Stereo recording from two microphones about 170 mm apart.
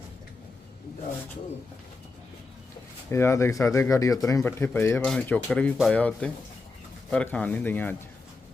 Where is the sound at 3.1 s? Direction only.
15° left (ahead or behind).